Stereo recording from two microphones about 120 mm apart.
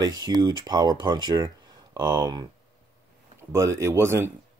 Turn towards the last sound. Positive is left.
turn(degrees=-20)  # may be behind; listen again after turning